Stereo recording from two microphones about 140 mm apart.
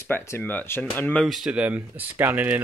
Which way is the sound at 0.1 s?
15° left (ahead or behind).